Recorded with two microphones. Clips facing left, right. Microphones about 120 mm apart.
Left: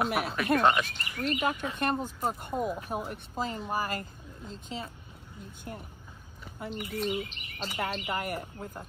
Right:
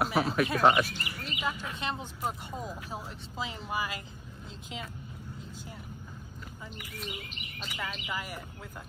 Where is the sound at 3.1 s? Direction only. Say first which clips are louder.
Left 4 dB; 45° left (ahead or behind).